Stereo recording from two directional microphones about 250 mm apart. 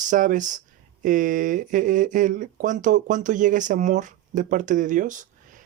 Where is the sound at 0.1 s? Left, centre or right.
Right.